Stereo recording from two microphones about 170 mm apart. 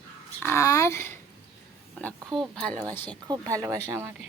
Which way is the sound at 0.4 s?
15° left (ahead or behind).